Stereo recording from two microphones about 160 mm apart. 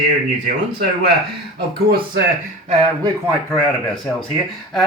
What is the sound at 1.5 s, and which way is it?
Speech, 90° right.